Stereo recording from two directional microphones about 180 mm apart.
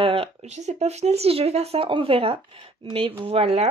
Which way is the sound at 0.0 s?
30° right (ahead or behind).